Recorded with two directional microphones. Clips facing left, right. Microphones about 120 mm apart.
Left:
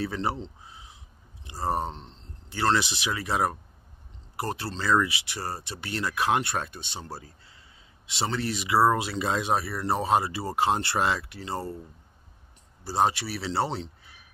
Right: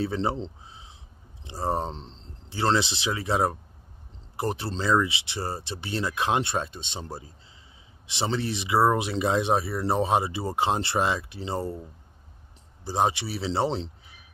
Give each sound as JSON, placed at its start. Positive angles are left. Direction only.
{"t": 0.0, "sound": "speech", "side_deg": -25}
{"t": 12.8, "sound": "speech", "side_deg": -20}